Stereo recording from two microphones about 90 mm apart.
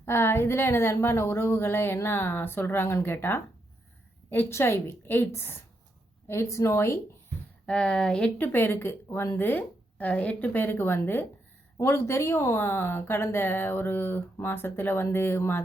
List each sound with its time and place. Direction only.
0.0 s a woman's voice: 25° left (ahead or behind)
7.7 s speech: 10° left (ahead or behind)
8.4 s a woman's voice: 25° left (ahead or behind)